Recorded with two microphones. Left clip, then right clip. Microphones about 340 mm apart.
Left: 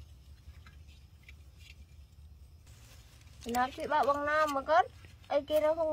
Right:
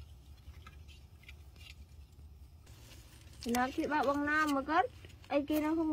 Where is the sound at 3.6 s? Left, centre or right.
Centre.